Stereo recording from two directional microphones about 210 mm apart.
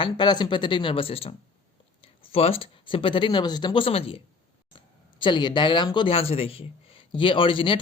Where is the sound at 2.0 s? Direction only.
25° left (ahead or behind).